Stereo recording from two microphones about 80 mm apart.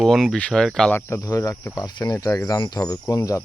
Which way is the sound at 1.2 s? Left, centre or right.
Left.